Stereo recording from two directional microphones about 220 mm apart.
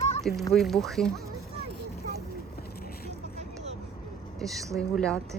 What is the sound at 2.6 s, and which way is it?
Boat, 45° left (ahead or behind).